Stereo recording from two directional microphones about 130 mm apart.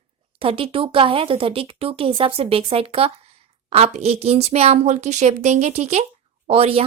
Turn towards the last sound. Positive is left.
turn(degrees=-50)  # may be behind; listen again after turning